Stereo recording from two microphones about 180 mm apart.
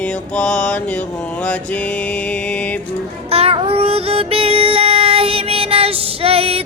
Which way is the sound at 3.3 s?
35° right (ahead or behind).